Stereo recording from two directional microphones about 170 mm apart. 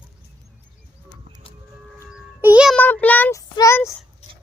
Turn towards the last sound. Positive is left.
turn(degrees=15)  # may be behind; listen again after turning